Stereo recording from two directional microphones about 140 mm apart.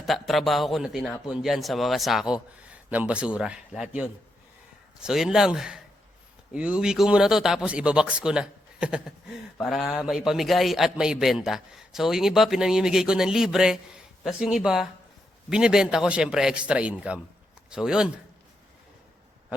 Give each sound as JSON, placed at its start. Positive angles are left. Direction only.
{"t": 0.0, "sound": "a man's voice", "side_deg": 0}